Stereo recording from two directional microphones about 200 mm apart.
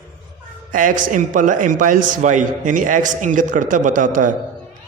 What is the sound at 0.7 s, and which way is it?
A man's voice, 40° right (ahead or behind).